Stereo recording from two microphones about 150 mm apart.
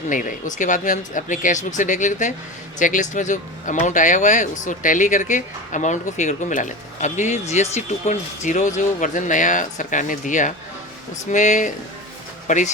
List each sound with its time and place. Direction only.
0.1 s speech: 60° left (ahead or behind)